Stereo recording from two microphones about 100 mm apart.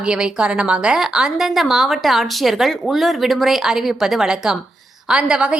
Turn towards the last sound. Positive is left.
turn(degrees=-10)  # may be behind; listen again after turning